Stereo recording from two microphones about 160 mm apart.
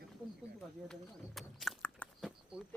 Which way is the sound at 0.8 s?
Centre (ahead or behind).